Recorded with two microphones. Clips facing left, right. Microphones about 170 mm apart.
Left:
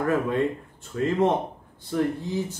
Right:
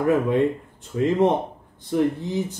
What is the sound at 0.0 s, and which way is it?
A man's voice, 20° right (ahead or behind).